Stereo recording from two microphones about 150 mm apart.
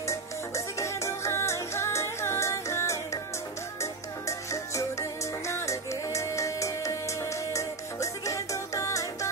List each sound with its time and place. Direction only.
0.0 s music: 20° left (ahead or behind)